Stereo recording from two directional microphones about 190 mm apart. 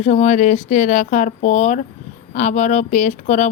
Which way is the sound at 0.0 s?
35° left (ahead or behind).